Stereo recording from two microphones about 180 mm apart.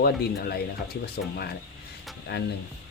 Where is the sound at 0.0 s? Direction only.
60° left (ahead or behind).